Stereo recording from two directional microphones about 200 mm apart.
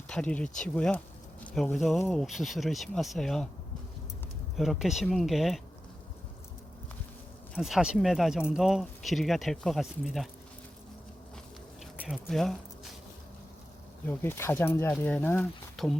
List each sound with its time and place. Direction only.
0.1 s speech: 5° left (ahead or behind)
4.5 s speech: centre (ahead or behind)
7.5 s speech: centre (ahead or behind)
11.9 s speech: 5° right (ahead or behind)
14.1 s speech: 10° left (ahead or behind)